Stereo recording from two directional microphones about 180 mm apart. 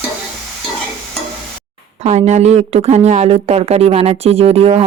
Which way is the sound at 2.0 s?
40° right (ahead or behind).